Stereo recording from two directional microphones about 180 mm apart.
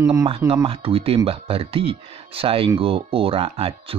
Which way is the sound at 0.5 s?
30° right (ahead or behind).